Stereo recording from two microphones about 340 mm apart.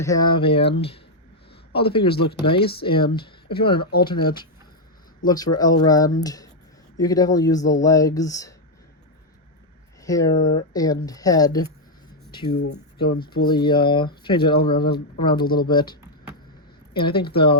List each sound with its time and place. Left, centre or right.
0.0 s speech: centre
10.0 s speech: centre
12.5 s speech: left
13.1 s speech: centre